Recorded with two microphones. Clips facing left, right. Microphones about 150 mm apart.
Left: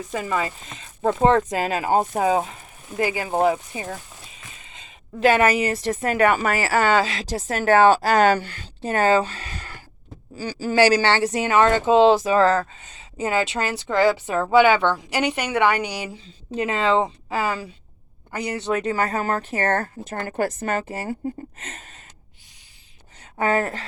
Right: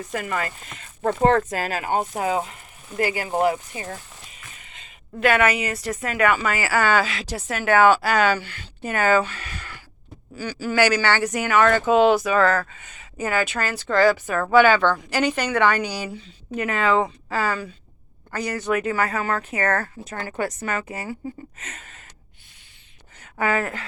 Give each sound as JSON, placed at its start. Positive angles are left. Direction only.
{"t": 0.1, "sound": "a woman's voice", "side_deg": 20}
{"t": 23.2, "sound": "speech", "side_deg": 30}